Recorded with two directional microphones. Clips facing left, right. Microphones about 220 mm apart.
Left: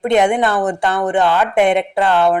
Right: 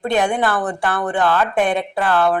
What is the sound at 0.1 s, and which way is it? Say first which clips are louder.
A woman's voice: left 4 dB; 20° left (ahead or behind).